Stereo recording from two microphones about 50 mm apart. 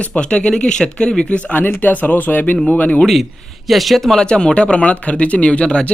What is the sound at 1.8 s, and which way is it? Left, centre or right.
Speech, left.